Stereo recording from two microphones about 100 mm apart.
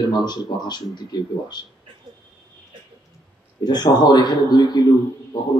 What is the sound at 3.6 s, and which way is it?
Speech, 45° left (ahead or behind).